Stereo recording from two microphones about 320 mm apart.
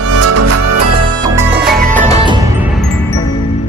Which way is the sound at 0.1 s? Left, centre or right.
Right.